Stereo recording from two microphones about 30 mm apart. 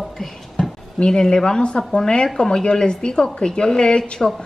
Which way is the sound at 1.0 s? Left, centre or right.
Left.